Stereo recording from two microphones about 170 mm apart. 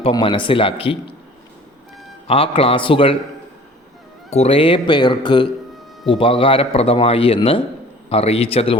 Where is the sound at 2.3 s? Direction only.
35° left (ahead or behind).